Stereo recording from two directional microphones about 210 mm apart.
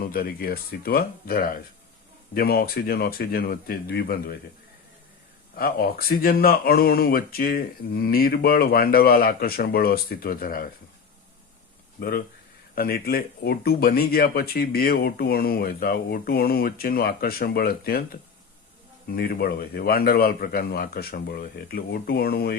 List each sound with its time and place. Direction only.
0.0 s speech: 45° left (ahead or behind)
5.5 s speech: 45° left (ahead or behind)
11.9 s speech: 45° left (ahead or behind)